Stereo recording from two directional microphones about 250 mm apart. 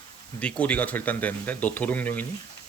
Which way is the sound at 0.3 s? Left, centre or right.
Centre.